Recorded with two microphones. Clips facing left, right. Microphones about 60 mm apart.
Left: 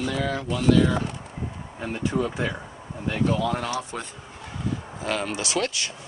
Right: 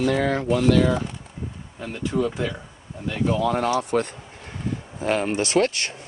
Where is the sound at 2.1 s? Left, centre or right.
Centre.